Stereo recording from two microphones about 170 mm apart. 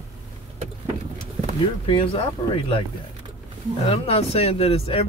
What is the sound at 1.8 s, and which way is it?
Speech, 30° left (ahead or behind).